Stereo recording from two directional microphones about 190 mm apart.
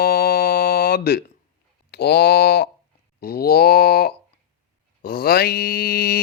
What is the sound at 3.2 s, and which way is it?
Groan, 55° left (ahead or behind).